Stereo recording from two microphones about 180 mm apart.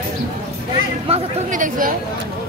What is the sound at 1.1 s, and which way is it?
Chatter, 45° right (ahead or behind).